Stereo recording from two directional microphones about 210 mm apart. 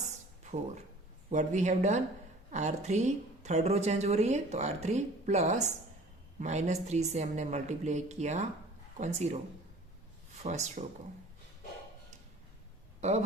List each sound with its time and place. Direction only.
1.3 s a woman's voice: 35° right (ahead or behind)
10.4 s a woman's voice: 35° right (ahead or behind)
13.0 s speech: 35° right (ahead or behind)